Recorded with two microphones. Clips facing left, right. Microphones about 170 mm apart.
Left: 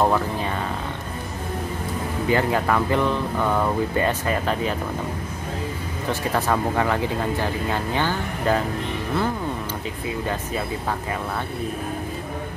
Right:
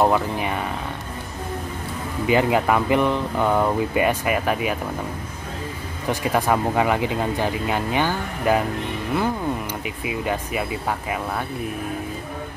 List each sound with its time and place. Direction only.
0.0 s speech: 15° right (ahead or behind)
2.2 s speech: 15° right (ahead or behind)
6.0 s speech: 15° right (ahead or behind)
9.8 s speech: 15° right (ahead or behind)